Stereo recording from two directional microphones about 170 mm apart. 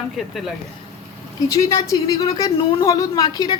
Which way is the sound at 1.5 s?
20° left (ahead or behind).